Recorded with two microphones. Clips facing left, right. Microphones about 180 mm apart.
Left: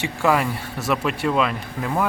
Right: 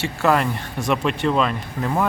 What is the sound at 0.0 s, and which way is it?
Speech, 10° left (ahead or behind).